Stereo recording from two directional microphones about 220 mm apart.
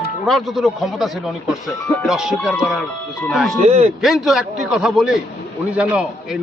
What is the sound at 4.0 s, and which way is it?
Speech, centre (ahead or behind).